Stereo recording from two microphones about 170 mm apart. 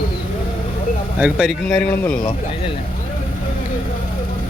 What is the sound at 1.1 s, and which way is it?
Speech, 5° right (ahead or behind).